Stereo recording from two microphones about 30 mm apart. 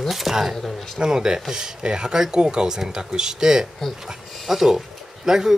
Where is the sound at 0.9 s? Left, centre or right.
Right.